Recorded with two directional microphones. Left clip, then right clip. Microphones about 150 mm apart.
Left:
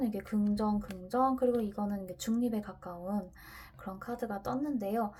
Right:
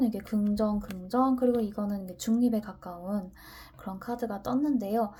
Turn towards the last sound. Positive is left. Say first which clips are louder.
# right 5 dB
turn(degrees=-20)  # may be behind; listen again after turning